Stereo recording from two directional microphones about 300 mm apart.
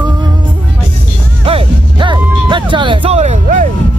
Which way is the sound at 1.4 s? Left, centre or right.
Centre.